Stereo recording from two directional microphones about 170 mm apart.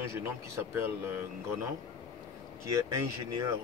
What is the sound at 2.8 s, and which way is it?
Speech, 20° right (ahead or behind).